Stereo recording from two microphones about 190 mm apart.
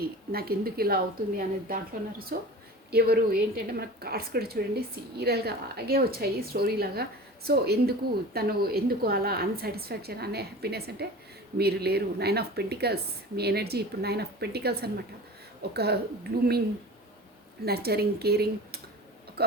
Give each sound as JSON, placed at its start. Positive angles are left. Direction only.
{"t": 0.0, "sound": "a woman's voice", "side_deg": -55}
{"t": 17.7, "sound": "a woman's voice", "side_deg": -55}
{"t": 19.4, "sound": "a sound", "side_deg": -55}